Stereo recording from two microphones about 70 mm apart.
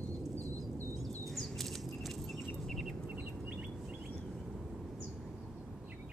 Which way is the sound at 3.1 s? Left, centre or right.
Right.